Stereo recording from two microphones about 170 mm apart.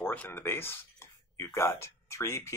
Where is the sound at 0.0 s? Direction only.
10° left (ahead or behind).